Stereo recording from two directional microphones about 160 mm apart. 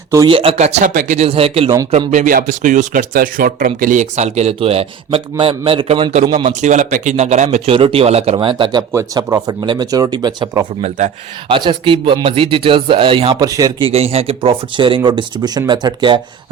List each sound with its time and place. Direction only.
0.3 s speech: 35° right (ahead or behind); by 1.3 s 50° right (ahead or behind)
1.3 s speech: 35° right (ahead or behind)
2.0 s speech: 55° right (ahead or behind); by 8.8 s 30° right (ahead or behind)
8.9 s speech: 20° right (ahead or behind)
10.8 s speech: 45° right (ahead or behind)
11.4 s speech: 30° right (ahead or behind)
13.8 s speech: 40° right (ahead or behind)